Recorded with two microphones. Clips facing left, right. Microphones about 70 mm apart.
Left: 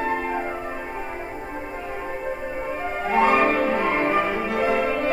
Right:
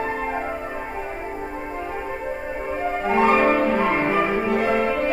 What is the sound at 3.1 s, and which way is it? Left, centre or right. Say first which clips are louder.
Music: right 1 dB; centre.